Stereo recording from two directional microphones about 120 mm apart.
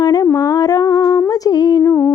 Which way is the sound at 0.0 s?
35° left (ahead or behind).